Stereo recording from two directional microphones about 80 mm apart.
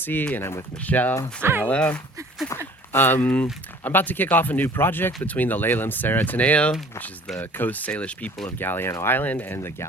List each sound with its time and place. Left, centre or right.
0.0 s speech: left
0.8 s speech: left
1.4 s speech: right
1.6 s speech: centre
2.9 s speech: left